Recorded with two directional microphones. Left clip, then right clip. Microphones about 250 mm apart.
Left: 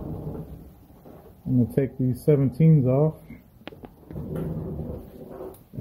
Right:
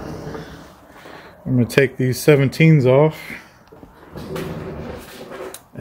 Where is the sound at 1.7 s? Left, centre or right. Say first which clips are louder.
Right 10 dB; right.